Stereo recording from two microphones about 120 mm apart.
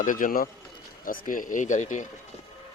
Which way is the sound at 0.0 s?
90° left.